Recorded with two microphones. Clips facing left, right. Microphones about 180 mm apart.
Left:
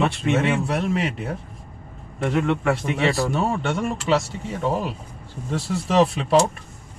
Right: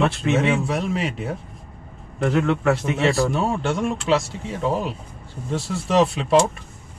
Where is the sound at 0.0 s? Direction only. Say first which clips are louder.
Right 1 dB; centre (ahead or behind).